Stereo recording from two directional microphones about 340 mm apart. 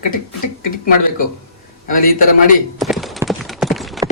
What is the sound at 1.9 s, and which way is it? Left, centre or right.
Speech, left.